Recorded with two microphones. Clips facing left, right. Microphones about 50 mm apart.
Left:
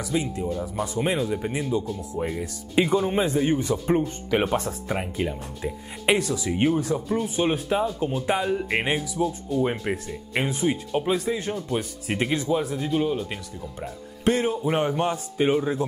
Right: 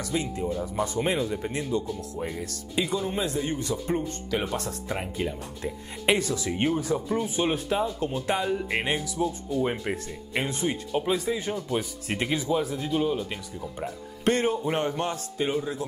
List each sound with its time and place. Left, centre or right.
0.0 s speech: centre
2.7 s a man's voice: left
4.6 s speech: centre
14.7 s a man's voice: centre